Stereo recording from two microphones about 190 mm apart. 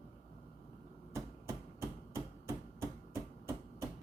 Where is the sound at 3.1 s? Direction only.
15° right (ahead or behind).